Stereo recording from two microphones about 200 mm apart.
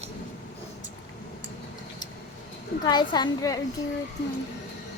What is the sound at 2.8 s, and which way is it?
Speech, 20° left (ahead or behind).